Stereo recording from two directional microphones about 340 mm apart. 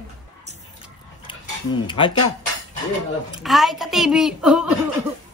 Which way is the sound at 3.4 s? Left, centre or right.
Centre.